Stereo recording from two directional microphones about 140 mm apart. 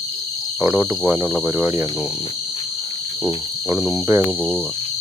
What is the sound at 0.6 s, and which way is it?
Cricket, 15° right (ahead or behind).